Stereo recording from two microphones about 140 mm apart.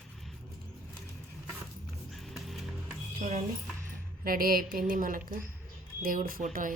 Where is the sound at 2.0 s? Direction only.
Centre (ahead or behind).